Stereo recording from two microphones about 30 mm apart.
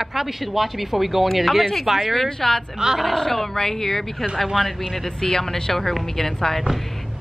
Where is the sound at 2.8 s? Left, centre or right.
Right.